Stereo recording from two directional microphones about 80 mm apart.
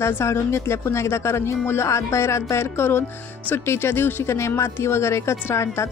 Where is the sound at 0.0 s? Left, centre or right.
Left.